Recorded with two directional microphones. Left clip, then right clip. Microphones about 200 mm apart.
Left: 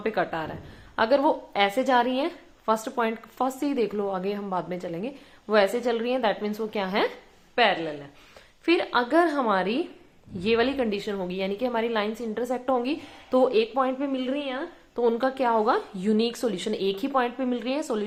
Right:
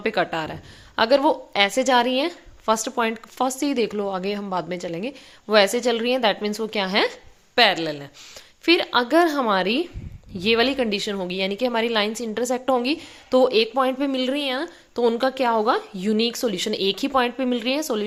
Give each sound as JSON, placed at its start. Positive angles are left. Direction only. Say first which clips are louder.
{"t": 0.0, "sound": "a woman's voice", "louder": "right 4 dB", "side_deg": -40}
{"t": 7.5, "sound": "a woman's voice", "louder": "right 4 dB", "side_deg": -50}
{"t": 8.6, "sound": "a woman's voice", "louder": "right 4 dB", "side_deg": -35}
{"t": 15.0, "sound": "a woman's voice", "louder": "right 3 dB", "side_deg": -35}